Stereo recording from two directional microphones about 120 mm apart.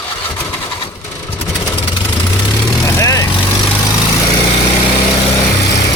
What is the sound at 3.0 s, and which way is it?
Vehicle, 30° left (ahead or behind).